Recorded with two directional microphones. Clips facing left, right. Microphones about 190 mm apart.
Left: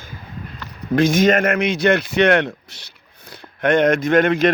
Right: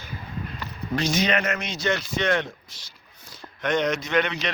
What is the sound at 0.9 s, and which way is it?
Speech, 55° left (ahead or behind).